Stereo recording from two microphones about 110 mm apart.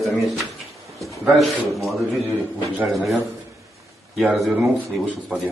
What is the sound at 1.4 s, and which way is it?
A man's voice, centre (ahead or behind).